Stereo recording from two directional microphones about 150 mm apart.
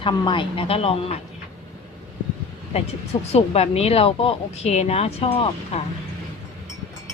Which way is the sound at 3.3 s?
45° left (ahead or behind).